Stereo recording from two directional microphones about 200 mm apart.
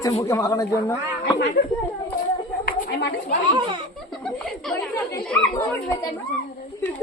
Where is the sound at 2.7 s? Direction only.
55° left (ahead or behind).